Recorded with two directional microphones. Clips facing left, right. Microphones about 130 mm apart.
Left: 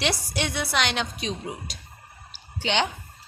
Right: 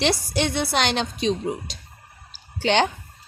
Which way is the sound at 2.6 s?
45° right (ahead or behind).